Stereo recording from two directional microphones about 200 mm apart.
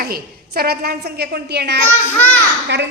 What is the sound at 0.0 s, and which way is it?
A woman's voice, 50° right (ahead or behind).